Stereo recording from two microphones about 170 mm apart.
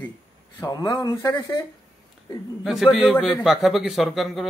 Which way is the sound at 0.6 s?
20° left (ahead or behind).